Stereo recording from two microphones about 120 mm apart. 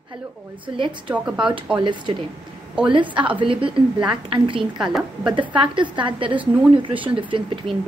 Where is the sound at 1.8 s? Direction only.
40° right (ahead or behind).